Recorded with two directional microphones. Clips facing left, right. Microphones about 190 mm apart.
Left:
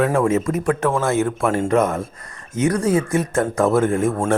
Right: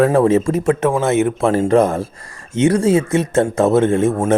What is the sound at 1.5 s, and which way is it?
Speech, 30° right (ahead or behind).